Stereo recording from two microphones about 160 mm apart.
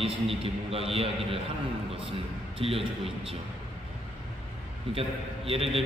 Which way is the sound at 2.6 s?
35° right (ahead or behind).